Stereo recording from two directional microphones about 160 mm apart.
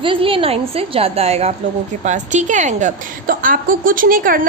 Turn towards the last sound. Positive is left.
turn(degrees=-60)  # may be behind; listen again after turning